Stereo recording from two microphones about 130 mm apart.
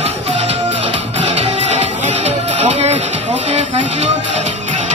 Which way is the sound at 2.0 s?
65° right (ahead or behind).